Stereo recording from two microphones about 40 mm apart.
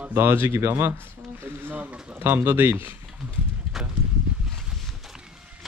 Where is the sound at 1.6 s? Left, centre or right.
Right.